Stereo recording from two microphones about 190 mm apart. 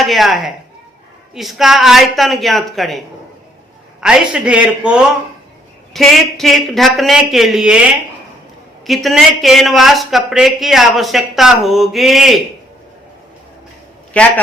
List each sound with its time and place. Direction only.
0.0 s speech: centre (ahead or behind)
4.0 s speech: 5° right (ahead or behind)
14.1 s a man's voice: 5° left (ahead or behind)